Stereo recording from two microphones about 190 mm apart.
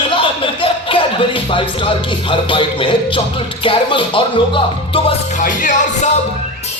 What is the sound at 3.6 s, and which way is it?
Speech, 30° left (ahead or behind).